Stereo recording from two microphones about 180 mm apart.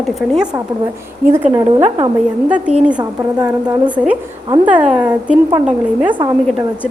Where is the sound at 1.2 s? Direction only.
15° right (ahead or behind).